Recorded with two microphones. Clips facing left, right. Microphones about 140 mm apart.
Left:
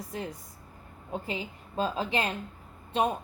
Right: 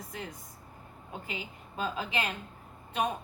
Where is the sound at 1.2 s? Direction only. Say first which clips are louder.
Left 5 dB; 35° left (ahead or behind).